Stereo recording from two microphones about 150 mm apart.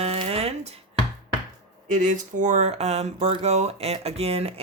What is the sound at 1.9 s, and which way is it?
Speech, 55° right (ahead or behind).